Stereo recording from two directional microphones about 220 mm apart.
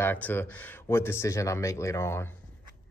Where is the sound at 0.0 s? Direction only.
10° left (ahead or behind).